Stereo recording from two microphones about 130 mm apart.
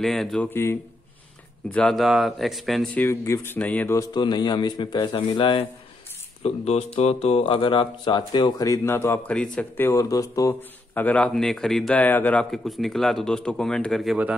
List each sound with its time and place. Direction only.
0.0 s speech: centre (ahead or behind)
0.5 s speech: 20° left (ahead or behind)
1.7 s speech: 5° left (ahead or behind)
3.1 s speech: 20° left (ahead or behind); by 5.7 s 40° left (ahead or behind)
6.4 s speech: 50° left (ahead or behind); by 10.5 s 25° left (ahead or behind)
11.0 s speech: 10° left (ahead or behind)